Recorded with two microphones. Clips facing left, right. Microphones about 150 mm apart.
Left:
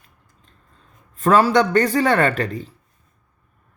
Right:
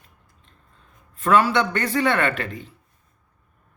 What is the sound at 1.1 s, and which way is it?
Speech, 35° left (ahead or behind).